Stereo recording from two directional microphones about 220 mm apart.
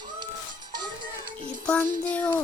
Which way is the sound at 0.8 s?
20° right (ahead or behind).